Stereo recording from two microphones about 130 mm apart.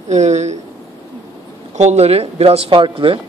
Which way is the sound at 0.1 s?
60° right (ahead or behind).